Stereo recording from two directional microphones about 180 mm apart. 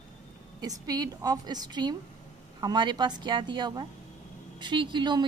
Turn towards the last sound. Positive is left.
turn(degrees=-25)  # may be behind; listen again after turning